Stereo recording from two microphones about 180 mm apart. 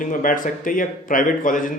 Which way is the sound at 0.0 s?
50° left (ahead or behind).